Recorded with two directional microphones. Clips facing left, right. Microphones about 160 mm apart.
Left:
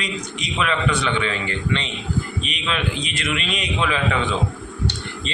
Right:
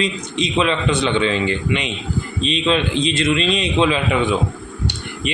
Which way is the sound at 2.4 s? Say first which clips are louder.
Right 8 dB; 25° right (ahead or behind).